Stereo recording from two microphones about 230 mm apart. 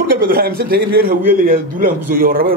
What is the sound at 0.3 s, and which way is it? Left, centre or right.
A man's voice, right.